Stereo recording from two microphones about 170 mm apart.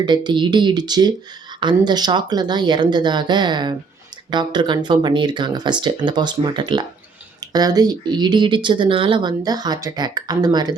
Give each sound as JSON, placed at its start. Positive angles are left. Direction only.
{"t": 0.0, "sound": "speech", "side_deg": -25}